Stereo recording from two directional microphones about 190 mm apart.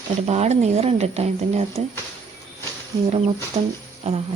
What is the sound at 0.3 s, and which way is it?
A woman's voice, 35° right (ahead or behind).